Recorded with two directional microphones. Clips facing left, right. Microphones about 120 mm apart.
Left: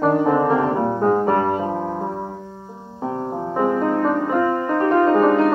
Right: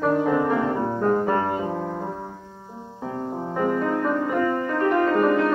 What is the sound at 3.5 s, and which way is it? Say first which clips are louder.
Music: left 4 dB; 25° left (ahead or behind).